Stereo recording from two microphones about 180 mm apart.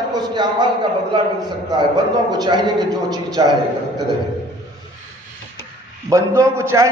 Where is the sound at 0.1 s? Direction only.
25° right (ahead or behind).